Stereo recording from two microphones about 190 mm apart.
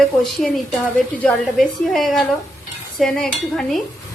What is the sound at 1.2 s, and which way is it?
A woman's voice, centre (ahead or behind).